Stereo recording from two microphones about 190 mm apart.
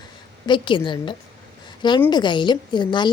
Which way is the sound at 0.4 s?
25° left (ahead or behind).